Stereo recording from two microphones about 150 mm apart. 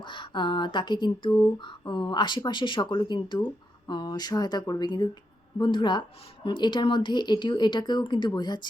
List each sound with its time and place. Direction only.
0.0 s speech: 30° left (ahead or behind)